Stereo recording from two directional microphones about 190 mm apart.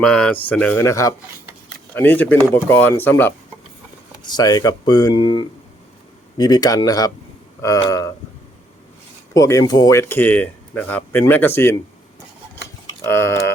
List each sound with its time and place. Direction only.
0.0 s speech: 5° left (ahead or behind)
4.2 s speech: 20° left (ahead or behind)
9.3 s speech: 15° left (ahead or behind)
13.0 s speech: 10° left (ahead or behind)